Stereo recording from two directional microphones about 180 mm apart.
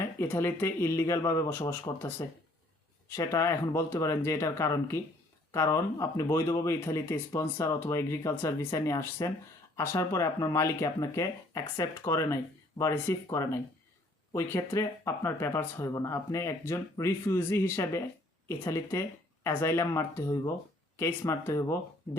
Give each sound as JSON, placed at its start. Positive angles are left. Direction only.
{"t": 0.0, "sound": "speech", "side_deg": 15}
{"t": 3.2, "sound": "speech", "side_deg": 15}